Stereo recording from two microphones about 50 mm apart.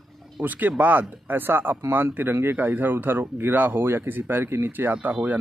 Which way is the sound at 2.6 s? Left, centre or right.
Right.